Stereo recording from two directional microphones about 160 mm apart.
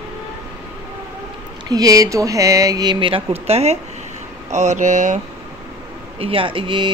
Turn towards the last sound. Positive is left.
turn(degrees=-30)  # may be behind; listen again after turning